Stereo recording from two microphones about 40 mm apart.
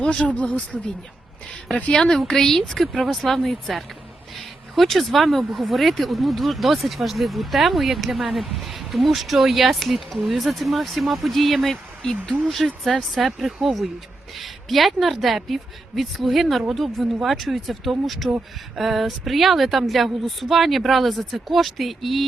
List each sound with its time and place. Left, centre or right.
0.0 s speech: centre
0.4 s speech: left
1.9 s a woman's voice: centre
13.2 s speech: centre